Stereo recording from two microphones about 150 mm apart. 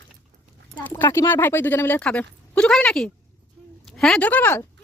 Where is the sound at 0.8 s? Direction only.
10° left (ahead or behind).